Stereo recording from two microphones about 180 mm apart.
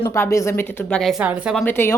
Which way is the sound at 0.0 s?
15° left (ahead or behind).